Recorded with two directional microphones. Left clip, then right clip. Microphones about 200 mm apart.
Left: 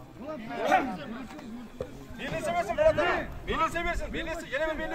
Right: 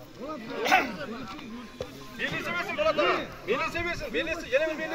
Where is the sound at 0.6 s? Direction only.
50° left (ahead or behind).